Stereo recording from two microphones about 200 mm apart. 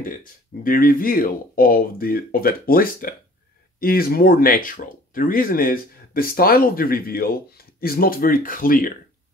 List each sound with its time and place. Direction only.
0.0 s speech: 45° left (ahead or behind)